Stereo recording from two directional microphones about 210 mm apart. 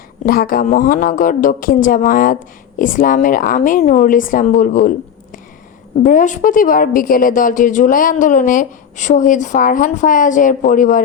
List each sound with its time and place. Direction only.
0.3 s speech: 45° left (ahead or behind)